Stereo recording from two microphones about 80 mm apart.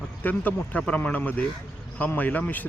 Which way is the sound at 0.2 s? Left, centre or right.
Left.